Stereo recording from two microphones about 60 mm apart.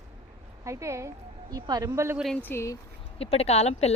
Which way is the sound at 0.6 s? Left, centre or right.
Right.